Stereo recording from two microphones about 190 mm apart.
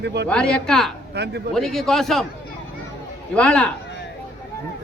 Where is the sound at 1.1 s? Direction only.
60° right (ahead or behind).